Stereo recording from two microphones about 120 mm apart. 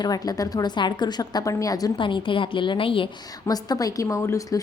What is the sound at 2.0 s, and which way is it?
A woman's voice, 45° left (ahead or behind).